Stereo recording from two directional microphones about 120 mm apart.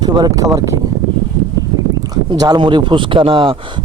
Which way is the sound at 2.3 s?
35° right (ahead or behind).